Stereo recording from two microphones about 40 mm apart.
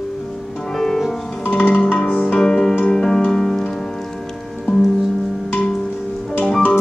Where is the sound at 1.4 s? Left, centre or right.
Left.